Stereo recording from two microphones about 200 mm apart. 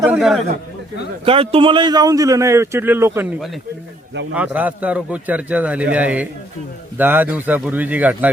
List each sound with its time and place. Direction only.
0.0 s speech: 5° right (ahead or behind)
1.2 s a man's voice: 30° right (ahead or behind); by 8.3 s 10° right (ahead or behind)